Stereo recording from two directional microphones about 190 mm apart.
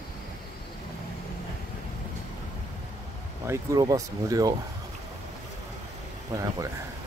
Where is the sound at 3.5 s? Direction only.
20° right (ahead or behind).